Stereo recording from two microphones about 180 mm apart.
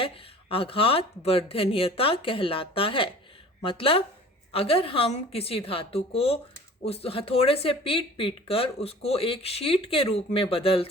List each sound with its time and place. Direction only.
0.0 s speech: 30° left (ahead or behind)